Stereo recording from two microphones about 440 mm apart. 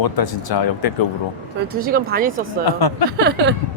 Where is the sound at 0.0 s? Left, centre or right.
Left.